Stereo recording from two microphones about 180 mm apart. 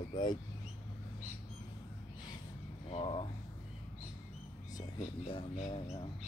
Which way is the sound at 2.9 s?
30° left (ahead or behind).